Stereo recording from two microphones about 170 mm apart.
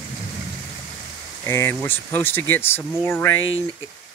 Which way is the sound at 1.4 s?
15° left (ahead or behind).